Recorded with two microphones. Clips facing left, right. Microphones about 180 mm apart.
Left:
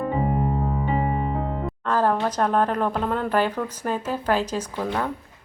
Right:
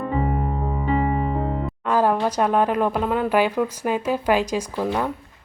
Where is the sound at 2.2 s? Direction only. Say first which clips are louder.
Right 2 dB; 10° right (ahead or behind).